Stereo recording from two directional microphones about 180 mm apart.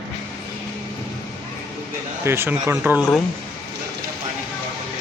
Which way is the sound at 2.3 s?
15° right (ahead or behind).